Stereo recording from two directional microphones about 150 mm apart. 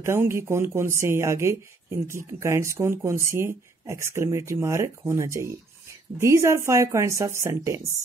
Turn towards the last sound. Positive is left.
turn(degrees=-20)  # may be behind; listen again after turning